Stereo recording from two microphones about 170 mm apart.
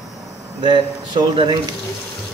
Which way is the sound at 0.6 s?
30° right (ahead or behind).